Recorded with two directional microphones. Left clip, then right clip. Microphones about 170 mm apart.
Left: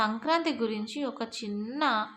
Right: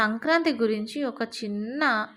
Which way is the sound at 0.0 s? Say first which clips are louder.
Right 4 dB; 25° right (ahead or behind).